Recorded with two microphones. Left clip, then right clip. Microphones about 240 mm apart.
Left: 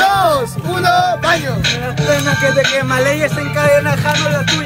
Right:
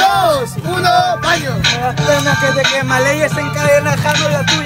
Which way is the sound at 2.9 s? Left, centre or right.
Centre.